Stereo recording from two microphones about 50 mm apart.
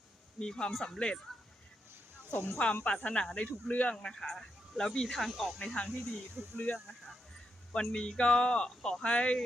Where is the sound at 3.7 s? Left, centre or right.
Left.